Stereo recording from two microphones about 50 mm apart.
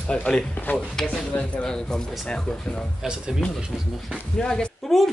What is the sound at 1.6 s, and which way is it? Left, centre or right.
Speech, centre.